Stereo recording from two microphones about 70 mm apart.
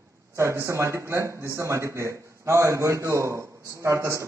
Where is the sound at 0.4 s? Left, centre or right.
Right.